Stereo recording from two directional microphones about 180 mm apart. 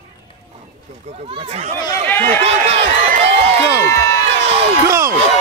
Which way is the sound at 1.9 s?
10° left (ahead or behind).